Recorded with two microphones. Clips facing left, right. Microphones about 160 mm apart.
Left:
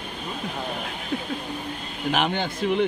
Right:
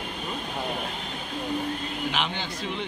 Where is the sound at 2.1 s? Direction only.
50° left (ahead or behind).